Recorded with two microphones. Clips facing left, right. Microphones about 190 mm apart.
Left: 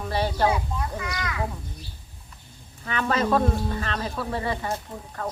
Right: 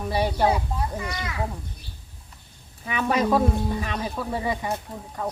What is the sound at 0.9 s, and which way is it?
Speech, 25° right (ahead or behind).